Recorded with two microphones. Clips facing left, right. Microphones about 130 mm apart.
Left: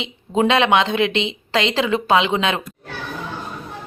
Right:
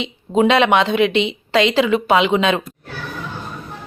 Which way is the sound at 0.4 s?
20° left (ahead or behind).